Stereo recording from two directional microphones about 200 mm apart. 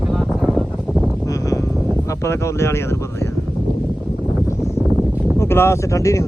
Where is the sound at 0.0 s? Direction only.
Centre (ahead or behind).